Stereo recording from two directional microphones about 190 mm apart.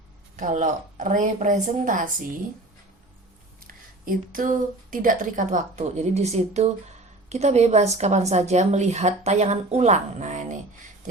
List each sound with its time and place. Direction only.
0.3 s a woman's voice: 40° right (ahead or behind)
3.6 s a woman's voice: 50° right (ahead or behind)